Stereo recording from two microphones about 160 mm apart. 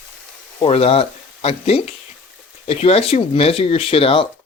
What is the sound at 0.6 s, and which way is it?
Speech, 40° left (ahead or behind).